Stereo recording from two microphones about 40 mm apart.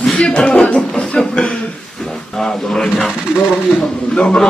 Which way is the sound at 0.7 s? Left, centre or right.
Left.